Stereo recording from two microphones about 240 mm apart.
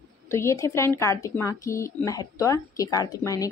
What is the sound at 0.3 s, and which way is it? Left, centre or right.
A woman's voice, centre.